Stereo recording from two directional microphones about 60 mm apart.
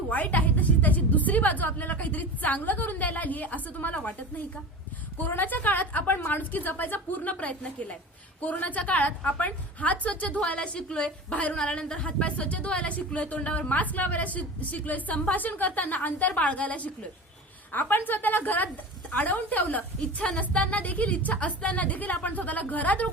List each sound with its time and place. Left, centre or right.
0.1 s a woman's voice: left
5.1 s a woman's voice: left